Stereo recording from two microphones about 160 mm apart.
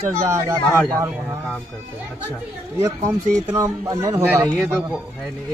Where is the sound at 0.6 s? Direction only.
10° left (ahead or behind).